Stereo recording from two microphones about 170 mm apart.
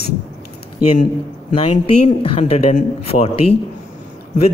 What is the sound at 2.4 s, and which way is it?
Speech, 45° left (ahead or behind).